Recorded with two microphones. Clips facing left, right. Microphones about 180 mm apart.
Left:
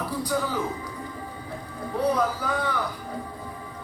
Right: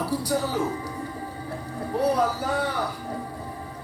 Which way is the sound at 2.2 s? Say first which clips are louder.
Right 1 dB; 35° right (ahead or behind).